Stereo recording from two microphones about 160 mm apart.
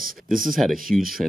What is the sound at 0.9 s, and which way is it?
Speech, 5° left (ahead or behind).